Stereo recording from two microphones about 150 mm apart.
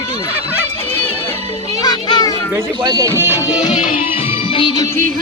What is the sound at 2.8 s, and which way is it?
Speech, 25° right (ahead or behind).